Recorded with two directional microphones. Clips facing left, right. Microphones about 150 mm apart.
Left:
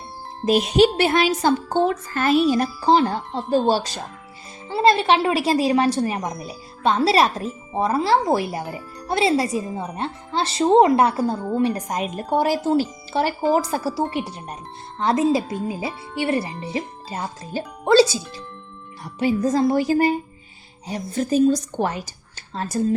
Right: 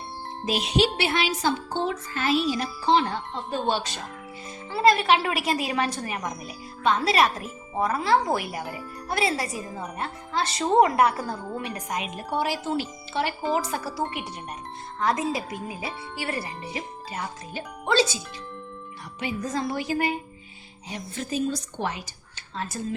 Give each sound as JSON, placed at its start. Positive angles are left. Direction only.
{"t": 0.4, "sound": "a woman's voice", "side_deg": 45}
{"t": 4.7, "sound": "a woman's voice", "side_deg": 25}
{"t": 19.2, "sound": "speech", "side_deg": 35}